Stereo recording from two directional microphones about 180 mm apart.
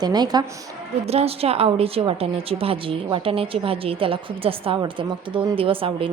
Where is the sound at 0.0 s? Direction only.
20° right (ahead or behind).